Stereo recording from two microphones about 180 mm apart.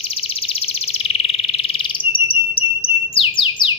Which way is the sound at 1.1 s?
35° left (ahead or behind).